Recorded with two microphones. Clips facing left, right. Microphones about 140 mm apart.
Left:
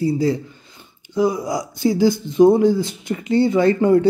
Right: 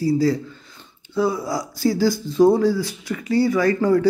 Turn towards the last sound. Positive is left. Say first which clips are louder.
# left 3 dB
turn(degrees=25)  # may be behind; listen again after turning